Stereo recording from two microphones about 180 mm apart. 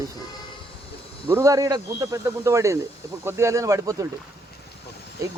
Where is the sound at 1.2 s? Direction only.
15° right (ahead or behind).